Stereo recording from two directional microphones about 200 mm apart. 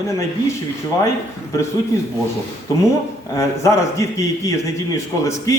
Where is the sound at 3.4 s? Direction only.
15° left (ahead or behind).